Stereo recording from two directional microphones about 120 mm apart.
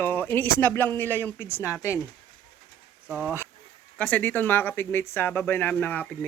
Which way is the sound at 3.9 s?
15° left (ahead or behind).